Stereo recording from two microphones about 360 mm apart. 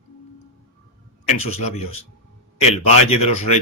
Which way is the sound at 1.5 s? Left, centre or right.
Centre.